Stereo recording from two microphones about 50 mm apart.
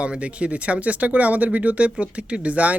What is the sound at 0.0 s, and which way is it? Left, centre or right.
Speech, right.